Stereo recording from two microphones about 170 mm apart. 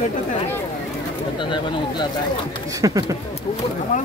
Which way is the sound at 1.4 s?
30° left (ahead or behind).